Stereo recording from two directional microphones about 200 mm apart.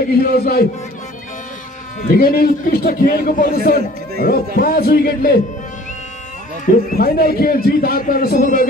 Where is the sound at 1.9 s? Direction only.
45° left (ahead or behind).